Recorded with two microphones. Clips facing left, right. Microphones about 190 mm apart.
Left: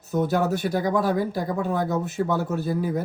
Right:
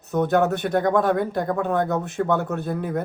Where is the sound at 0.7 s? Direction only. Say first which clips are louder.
Right 3 dB; 5° left (ahead or behind).